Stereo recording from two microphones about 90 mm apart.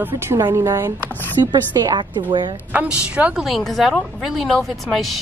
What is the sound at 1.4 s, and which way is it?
A woman's voice, 55° right (ahead or behind).